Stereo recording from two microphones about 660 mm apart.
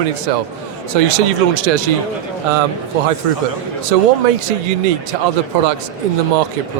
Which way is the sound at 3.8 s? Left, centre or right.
Right.